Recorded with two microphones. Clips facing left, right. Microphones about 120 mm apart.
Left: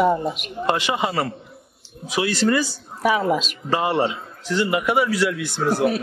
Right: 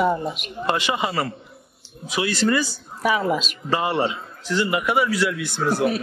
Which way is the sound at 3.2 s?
25° left (ahead or behind).